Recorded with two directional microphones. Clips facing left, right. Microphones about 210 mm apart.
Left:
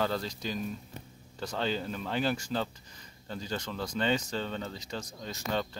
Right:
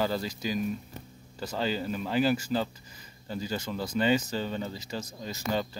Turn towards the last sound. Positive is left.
turn(degrees=-5)  # may be behind; listen again after turning